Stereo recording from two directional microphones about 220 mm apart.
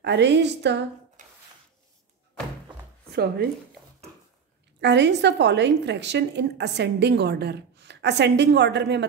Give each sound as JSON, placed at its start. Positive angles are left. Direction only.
{"t": 0.0, "sound": "a woman's voice", "side_deg": -50}
{"t": 1.2, "sound": "a sound", "side_deg": -35}
{"t": 3.1, "sound": "speech", "side_deg": -45}
{"t": 4.7, "sound": "a woman's voice", "side_deg": -50}